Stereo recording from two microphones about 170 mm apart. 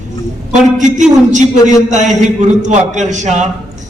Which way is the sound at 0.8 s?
45° right (ahead or behind).